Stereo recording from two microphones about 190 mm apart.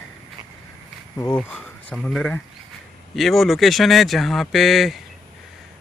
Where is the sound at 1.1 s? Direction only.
10° left (ahead or behind).